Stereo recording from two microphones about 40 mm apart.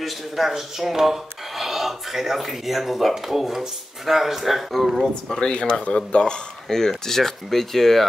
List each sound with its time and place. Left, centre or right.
0.0 s speech: centre
5.3 s speech: centre
6.7 s speech: centre